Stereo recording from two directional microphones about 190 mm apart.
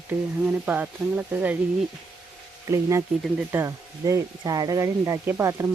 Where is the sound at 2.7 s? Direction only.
15° right (ahead or behind).